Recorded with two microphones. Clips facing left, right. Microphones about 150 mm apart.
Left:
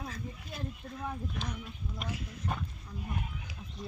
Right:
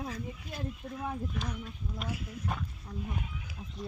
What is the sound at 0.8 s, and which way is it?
Speech, 10° right (ahead or behind).